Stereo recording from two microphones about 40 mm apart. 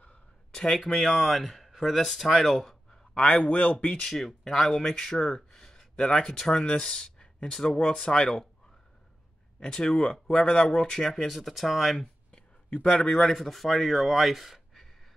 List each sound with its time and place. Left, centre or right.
0.5 s speech: centre
3.2 s a man's voice: left
4.0 s speech: centre
9.6 s speech: centre
12.3 s a sound: left
12.8 s speech: centre
13.1 s speech: centre